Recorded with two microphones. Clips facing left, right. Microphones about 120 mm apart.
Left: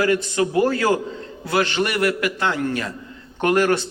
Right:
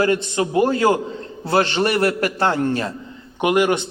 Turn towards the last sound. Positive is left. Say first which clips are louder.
# right 1 dB
turn(degrees=-15)  # may be behind; listen again after turning